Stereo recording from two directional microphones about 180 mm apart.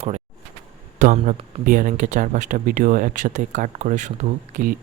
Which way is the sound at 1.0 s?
45° right (ahead or behind).